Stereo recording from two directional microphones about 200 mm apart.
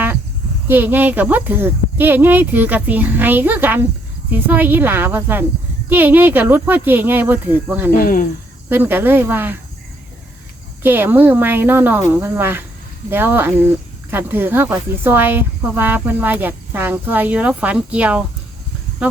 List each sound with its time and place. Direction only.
0.7 s speech: 10° right (ahead or behind)
7.9 s speech: 45° left (ahead or behind)
8.7 s speech: 10° right (ahead or behind)
10.8 s speech: 10° right (ahead or behind)